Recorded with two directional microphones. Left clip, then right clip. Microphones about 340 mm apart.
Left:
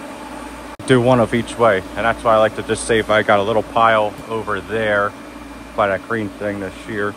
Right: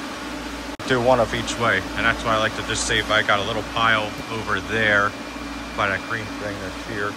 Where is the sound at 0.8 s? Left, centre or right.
Centre.